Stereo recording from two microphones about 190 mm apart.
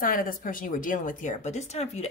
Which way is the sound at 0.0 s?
45° left (ahead or behind).